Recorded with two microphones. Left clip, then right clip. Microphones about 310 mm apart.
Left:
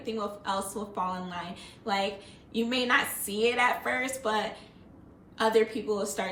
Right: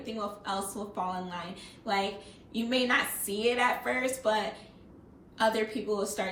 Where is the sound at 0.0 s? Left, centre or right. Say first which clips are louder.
Left 3 dB; centre.